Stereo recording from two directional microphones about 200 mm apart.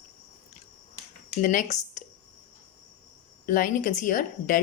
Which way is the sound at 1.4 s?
40° left (ahead or behind).